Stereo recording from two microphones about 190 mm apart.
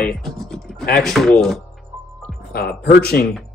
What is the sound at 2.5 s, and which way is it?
Speech, 55° left (ahead or behind).